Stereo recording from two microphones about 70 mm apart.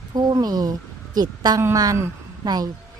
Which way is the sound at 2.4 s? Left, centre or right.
Right.